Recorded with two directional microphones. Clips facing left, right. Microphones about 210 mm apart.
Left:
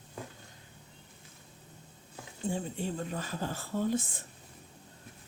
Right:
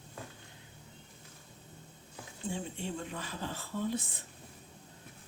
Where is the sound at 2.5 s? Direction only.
40° left (ahead or behind).